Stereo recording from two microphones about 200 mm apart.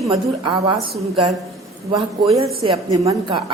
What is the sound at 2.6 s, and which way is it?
Speech, 15° right (ahead or behind).